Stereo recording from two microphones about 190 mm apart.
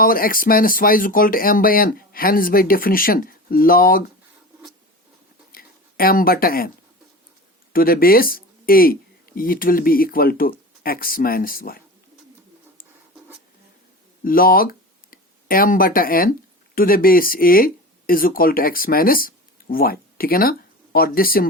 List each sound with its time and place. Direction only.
0.0 s speech: 50° left (ahead or behind)
5.5 s a sound: 50° left (ahead or behind)
7.7 s speech: 50° left (ahead or behind)
14.3 s speech: 50° left (ahead or behind)